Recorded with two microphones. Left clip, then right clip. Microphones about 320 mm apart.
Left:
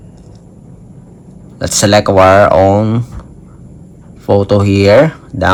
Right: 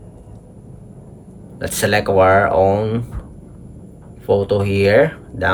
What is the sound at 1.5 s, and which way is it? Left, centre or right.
Speech, centre.